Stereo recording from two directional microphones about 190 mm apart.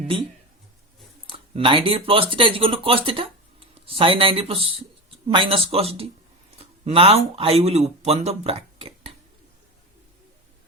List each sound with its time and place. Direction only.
1.5 s speech: 25° right (ahead or behind)